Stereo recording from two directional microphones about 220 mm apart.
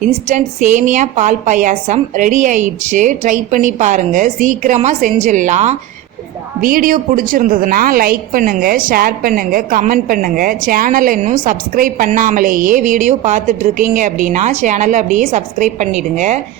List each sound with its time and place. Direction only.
0.1 s a woman's voice: 30° right (ahead or behind)